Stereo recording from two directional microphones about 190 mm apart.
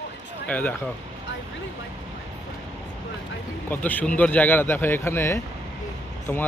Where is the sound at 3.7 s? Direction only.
10° left (ahead or behind).